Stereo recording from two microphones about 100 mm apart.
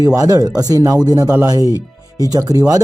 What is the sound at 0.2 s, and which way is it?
Speech, 35° right (ahead or behind).